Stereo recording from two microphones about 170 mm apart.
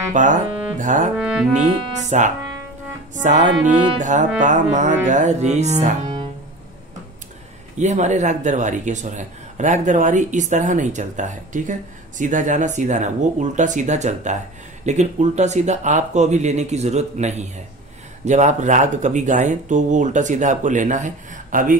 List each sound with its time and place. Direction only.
0.1 s a man's voice: 50° right (ahead or behind)
1.1 s brass instrument: 5° right (ahead or behind)
2.0 s a man's voice: 45° right (ahead or behind)
7.8 s a man's voice: 45° right (ahead or behind)